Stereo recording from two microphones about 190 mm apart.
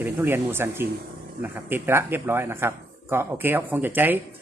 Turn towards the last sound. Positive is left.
turn(degrees=-10)  # may be behind; listen again after turning